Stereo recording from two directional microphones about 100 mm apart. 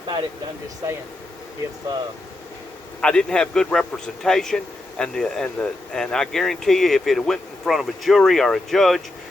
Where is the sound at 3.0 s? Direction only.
10° left (ahead or behind).